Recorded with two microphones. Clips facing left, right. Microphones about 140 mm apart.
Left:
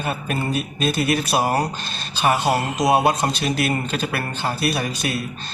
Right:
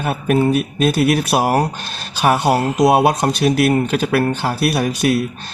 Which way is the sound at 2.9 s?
60° right (ahead or behind).